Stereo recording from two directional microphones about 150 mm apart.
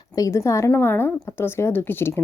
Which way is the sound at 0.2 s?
20° left (ahead or behind).